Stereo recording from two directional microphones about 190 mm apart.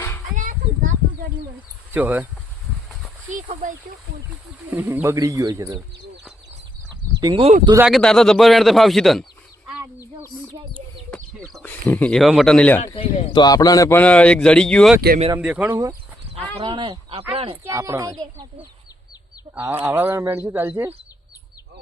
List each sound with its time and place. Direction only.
0.3 s a sound: 45° right (ahead or behind)
1.9 s speech: 10° right (ahead or behind)
3.2 s speech: 40° right (ahead or behind)
4.7 s speech: 10° right (ahead or behind)
7.2 s speech: 25° right (ahead or behind)
7.9 s speech: centre (ahead or behind)
9.6 s chicken: 5° right (ahead or behind)
11.1 s speech: 5° left (ahead or behind)
12.9 s a man's voice: 20° left (ahead or behind); by 14.9 s 5° left (ahead or behind)
15.4 s speech: 5° right (ahead or behind)
16.6 s speech: 25° right (ahead or behind)
17.6 s speech: 15° right (ahead or behind)
19.5 s speech: 15° right (ahead or behind)